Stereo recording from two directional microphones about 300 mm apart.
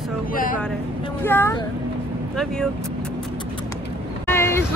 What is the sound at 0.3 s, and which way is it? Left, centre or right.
Speech, left.